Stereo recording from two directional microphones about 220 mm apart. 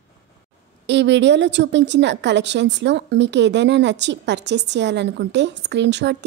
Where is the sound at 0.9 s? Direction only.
55° right (ahead or behind).